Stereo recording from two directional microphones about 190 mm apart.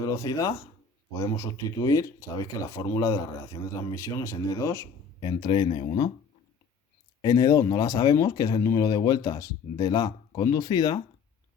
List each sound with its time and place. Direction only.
0.0 s speech: 15° left (ahead or behind)
5.2 s speech: 25° left (ahead or behind)
7.2 s speech: 20° left (ahead or behind)